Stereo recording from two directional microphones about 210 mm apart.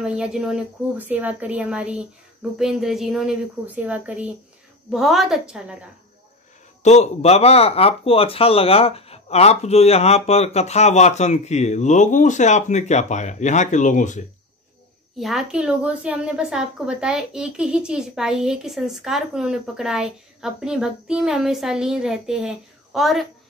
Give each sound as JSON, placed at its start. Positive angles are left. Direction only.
{"t": 0.0, "sound": "a woman's voice", "side_deg": -5}
{"t": 6.8, "sound": "speech", "side_deg": 30}
{"t": 15.1, "sound": "a woman's voice", "side_deg": 0}